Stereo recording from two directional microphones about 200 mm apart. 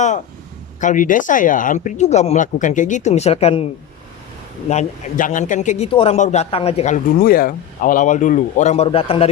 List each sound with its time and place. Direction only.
0.8 s speech: 40° left (ahead or behind)
4.7 s speech: 40° left (ahead or behind)